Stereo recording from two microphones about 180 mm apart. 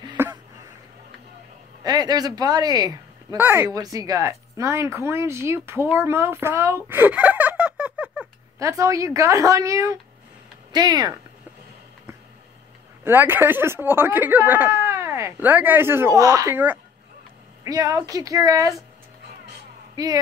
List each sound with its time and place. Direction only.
0.2 s speech: 15° right (ahead or behind)
1.8 s a woman's voice: 20° right (ahead or behind); by 8.3 s 5° right (ahead or behind)
8.5 s speech: 15° right (ahead or behind)
13.0 s speech: 10° right (ahead or behind)
20.0 s speech: 20° right (ahead or behind)